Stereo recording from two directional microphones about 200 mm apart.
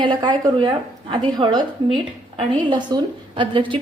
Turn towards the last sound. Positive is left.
turn(degrees=-25)  # may be behind; listen again after turning